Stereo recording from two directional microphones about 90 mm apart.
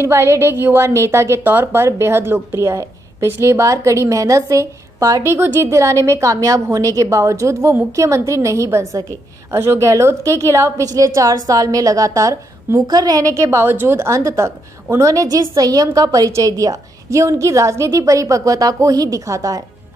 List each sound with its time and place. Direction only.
0.0 s a woman's voice: 30° right (ahead or behind)